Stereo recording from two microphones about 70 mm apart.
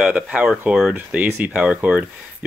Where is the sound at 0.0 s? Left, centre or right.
Centre.